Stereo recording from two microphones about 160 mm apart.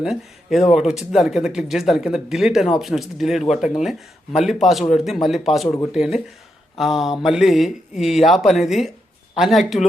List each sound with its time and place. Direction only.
0.0 s speech: 5° right (ahead or behind)
5.6 s speech: 20° left (ahead or behind)
5.9 s speech: 5° right (ahead or behind)